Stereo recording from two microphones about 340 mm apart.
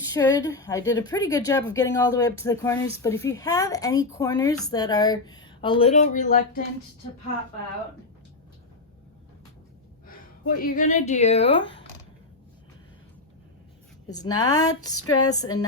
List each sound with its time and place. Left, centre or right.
0.1 s speech: centre
10.1 s speech: left
14.1 s speech: centre